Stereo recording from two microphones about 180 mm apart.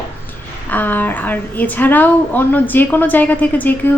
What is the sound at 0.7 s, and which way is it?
A woman's voice, 10° left (ahead or behind).